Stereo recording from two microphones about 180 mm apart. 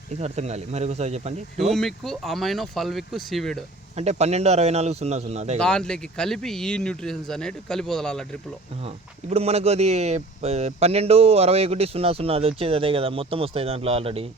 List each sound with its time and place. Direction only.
0.2 s speech: 35° right (ahead or behind)
1.6 s speech: centre (ahead or behind)
3.9 s speech: 35° right (ahead or behind)
5.5 s speech: 5° left (ahead or behind)
9.3 s speech: 35° right (ahead or behind)